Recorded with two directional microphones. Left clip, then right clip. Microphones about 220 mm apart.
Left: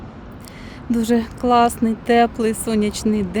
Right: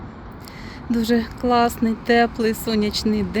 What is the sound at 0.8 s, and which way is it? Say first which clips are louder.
Speech: left 1 dB; 10° left (ahead or behind).